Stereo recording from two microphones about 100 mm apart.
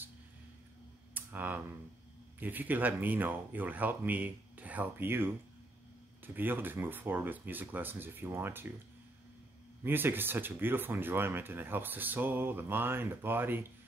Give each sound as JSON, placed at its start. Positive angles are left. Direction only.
{"t": 1.1, "sound": "speech", "side_deg": -20}
{"t": 9.8, "sound": "speech", "side_deg": -20}